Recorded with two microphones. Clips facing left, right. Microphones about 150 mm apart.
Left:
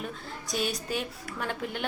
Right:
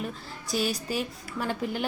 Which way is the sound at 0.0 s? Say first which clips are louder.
Right 2 dB; centre (ahead or behind).